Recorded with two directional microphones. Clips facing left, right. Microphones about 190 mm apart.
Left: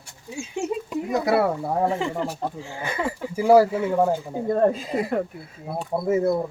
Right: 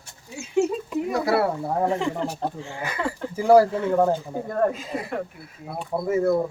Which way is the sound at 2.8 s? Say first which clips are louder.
Left 1 dB; 25° left (ahead or behind).